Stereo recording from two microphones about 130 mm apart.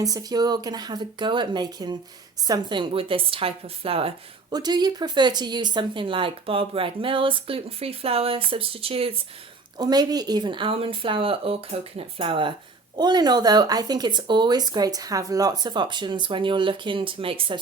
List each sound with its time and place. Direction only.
0.0 s speech: 30° right (ahead or behind); by 4.1 s 45° right (ahead or behind)
4.5 s speech: 30° right (ahead or behind)
9.7 s speech: 30° right (ahead or behind)